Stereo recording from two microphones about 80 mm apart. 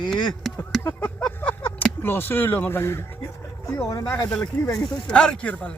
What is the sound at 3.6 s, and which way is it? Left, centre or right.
Speech, left.